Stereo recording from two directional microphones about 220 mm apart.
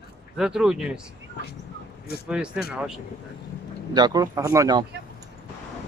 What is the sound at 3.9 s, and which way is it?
Speech, 20° right (ahead or behind).